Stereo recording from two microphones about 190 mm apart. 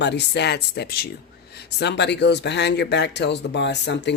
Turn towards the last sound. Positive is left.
turn(degrees=65)  # may be behind; listen again after turning